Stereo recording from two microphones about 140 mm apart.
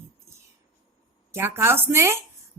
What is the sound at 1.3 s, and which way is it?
Speech, 20° right (ahead or behind).